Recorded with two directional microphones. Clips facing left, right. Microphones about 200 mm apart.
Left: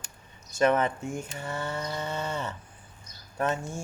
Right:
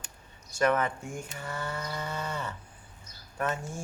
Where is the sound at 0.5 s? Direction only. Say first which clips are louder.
Left 3 dB; 25° left (ahead or behind).